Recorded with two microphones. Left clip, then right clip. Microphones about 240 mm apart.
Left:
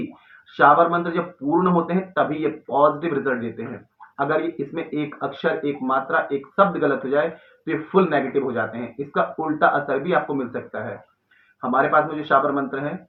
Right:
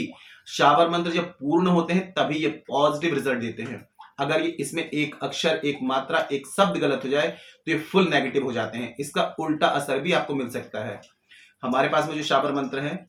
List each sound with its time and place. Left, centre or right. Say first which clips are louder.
0.5 s speech: left 3 dB; right